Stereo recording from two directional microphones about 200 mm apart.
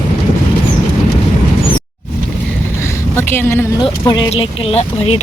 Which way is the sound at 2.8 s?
10° left (ahead or behind).